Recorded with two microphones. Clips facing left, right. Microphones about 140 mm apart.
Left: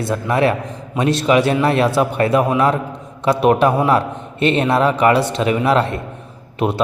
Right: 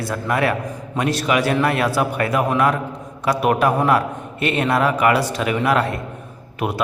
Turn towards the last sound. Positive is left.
turn(degrees=25)  # may be behind; listen again after turning